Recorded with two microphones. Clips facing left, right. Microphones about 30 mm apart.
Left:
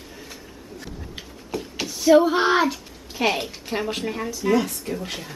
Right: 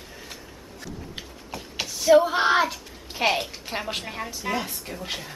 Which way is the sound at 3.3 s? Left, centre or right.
Centre.